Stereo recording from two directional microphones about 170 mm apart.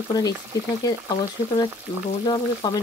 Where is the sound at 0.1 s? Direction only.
25° left (ahead or behind).